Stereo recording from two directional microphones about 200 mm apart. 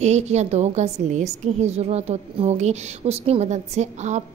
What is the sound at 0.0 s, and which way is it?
A woman's voice, 35° right (ahead or behind).